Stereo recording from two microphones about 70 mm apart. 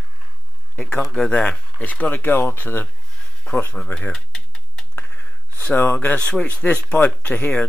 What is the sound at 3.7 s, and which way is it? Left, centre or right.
Typewriter, centre.